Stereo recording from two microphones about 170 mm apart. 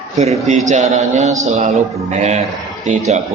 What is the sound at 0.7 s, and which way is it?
A man's voice, 45° right (ahead or behind).